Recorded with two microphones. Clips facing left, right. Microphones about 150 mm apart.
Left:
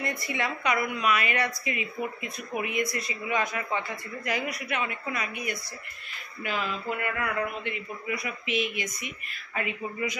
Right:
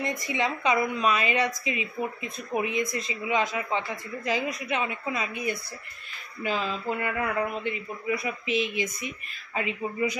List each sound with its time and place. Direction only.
0.3 s speech: 20° right (ahead or behind)